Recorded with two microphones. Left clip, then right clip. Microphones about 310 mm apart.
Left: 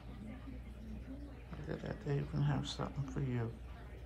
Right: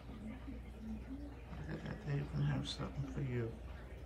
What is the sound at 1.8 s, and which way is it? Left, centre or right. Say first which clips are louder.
Speech: left 6 dB; centre.